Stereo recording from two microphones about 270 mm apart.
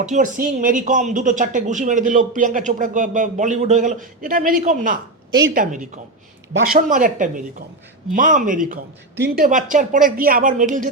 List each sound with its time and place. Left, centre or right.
0.0 s speech: right